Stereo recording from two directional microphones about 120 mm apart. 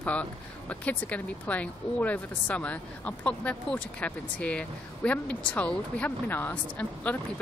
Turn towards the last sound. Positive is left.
turn(degrees=15)  # may be behind; listen again after turning